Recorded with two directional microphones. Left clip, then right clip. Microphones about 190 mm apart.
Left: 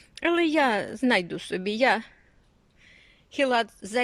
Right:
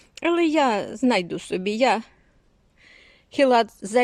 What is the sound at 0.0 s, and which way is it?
A woman's voice, 10° right (ahead or behind).